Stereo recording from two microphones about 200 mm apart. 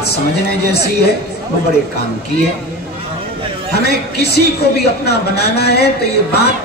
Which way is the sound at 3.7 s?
55° left (ahead or behind).